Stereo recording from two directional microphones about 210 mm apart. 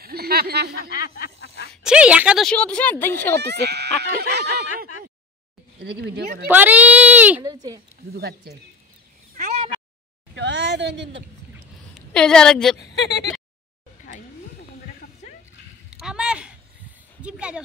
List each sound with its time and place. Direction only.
0.0 s a sound: 50° right (ahead or behind)
0.8 s speech: 45° left (ahead or behind)
1.7 s speech: 5° right (ahead or behind)
3.3 s speech: 50° right (ahead or behind)
6.4 s speech: 10° right (ahead or behind)
8.1 s speech: 50° right (ahead or behind)
9.3 s meow: 35° right (ahead or behind)
10.3 s a sound: 55° right (ahead or behind)
11.9 s a woman's voice: 5° left (ahead or behind)
12.7 s speech: 55° left (ahead or behind)
15.9 s a sound: 5° right (ahead or behind)
17.2 s speech: 5° right (ahead or behind)